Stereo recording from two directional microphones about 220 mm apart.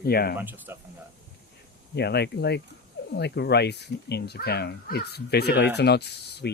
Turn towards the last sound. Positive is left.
turn(degrees=50)  # may be behind; listen again after turning